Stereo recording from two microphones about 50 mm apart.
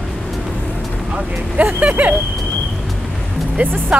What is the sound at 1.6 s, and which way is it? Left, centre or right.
Speech, right.